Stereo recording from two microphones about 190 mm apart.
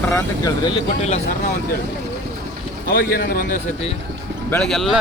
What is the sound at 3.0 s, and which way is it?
Speech, 50° left (ahead or behind).